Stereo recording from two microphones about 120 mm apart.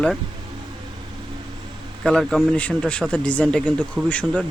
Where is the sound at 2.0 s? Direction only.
5° left (ahead or behind).